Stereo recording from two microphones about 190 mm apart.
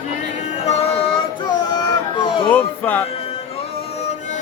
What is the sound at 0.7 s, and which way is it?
Child singing, 35° left (ahead or behind).